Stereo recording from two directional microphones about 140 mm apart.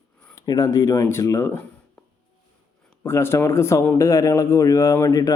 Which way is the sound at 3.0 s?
20° left (ahead or behind).